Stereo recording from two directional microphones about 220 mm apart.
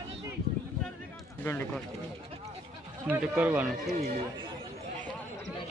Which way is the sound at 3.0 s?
5° right (ahead or behind).